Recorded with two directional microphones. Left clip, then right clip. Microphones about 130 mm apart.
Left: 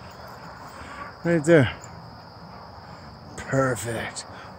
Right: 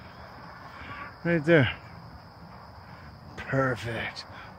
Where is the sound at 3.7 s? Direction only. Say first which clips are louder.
Left 3 dB; 15° left (ahead or behind).